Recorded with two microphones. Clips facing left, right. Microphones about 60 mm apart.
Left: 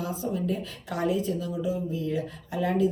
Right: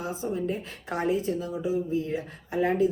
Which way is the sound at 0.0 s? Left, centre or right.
Right.